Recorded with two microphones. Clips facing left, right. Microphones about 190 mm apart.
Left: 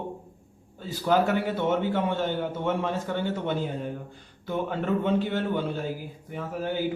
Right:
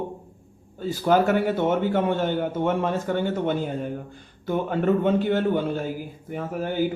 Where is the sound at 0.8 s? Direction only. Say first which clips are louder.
Right 3 dB; 50° right (ahead or behind).